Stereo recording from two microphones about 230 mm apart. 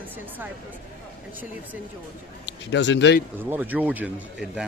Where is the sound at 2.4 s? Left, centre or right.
Left.